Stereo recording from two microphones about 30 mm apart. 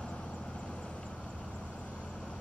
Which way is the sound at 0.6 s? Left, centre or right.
Left.